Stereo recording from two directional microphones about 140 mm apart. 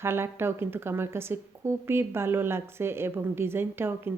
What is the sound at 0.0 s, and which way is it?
A woman's voice, 15° right (ahead or behind).